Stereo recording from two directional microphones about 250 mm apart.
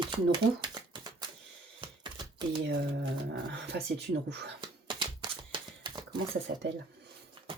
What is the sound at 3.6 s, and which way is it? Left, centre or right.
Speech, right.